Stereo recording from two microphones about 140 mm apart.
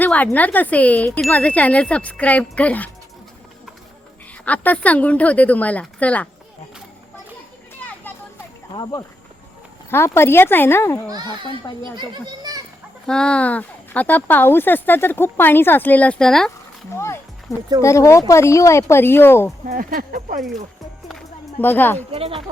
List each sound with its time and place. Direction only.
0.0 s a sound: 10° left (ahead or behind)
0.3 s speech: 10° left (ahead or behind)
4.4 s speech: 10° left (ahead or behind)
8.7 s speech: 30° left (ahead or behind)
9.9 s speech: 15° left (ahead or behind)
11.8 s a child's voice: 35° right (ahead or behind)
13.1 s speech: 5° left (ahead or behind)
17.8 s speech: 20° left (ahead or behind)
19.6 s speech: 85° right; by 20.4 s 70° right (ahead or behind)
21.6 s speech: 15° left (ahead or behind)
22.1 s speech: 45° right (ahead or behind)